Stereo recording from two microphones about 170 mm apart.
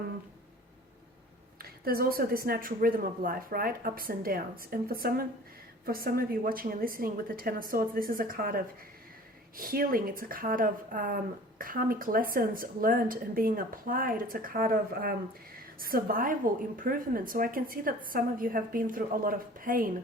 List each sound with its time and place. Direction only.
1.5 s a woman's voice: 60° right (ahead or behind)